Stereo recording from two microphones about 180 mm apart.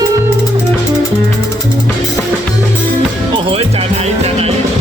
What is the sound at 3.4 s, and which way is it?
Music, 30° right (ahead or behind).